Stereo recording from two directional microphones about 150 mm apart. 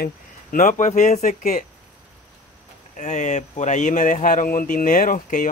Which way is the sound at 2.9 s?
55° left (ahead or behind).